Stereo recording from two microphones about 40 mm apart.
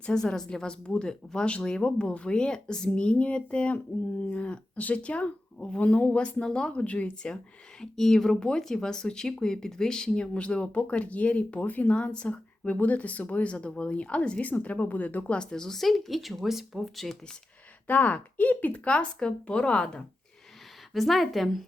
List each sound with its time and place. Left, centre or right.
0.1 s speech: centre
7.8 s speech: centre
10.1 s speech: left
15.3 s speech: left
15.8 s a woman's voice: centre
17.8 s speech: left
18.7 s speech: left
20.9 s a woman's voice: centre